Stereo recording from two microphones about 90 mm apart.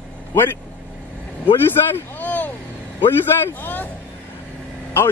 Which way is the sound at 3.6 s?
20° left (ahead or behind).